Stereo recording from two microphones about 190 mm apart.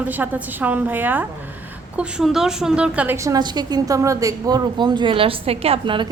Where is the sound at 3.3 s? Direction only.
20° right (ahead or behind).